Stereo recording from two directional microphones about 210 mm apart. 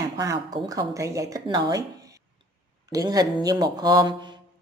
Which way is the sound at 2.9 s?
15° right (ahead or behind).